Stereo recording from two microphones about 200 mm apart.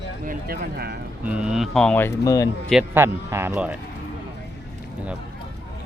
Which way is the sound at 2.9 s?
10° right (ahead or behind).